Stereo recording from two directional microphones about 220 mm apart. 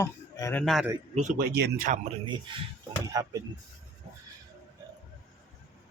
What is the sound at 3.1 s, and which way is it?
Speech, 15° right (ahead or behind).